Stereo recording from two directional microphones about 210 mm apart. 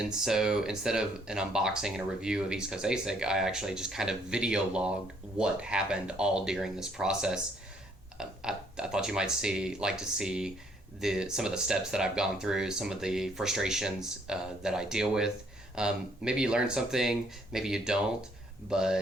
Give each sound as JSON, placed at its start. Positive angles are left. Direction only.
{"t": 0.0, "sound": "speech", "side_deg": 0}